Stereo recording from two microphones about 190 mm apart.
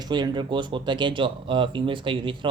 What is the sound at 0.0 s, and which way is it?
Speech, 25° right (ahead or behind).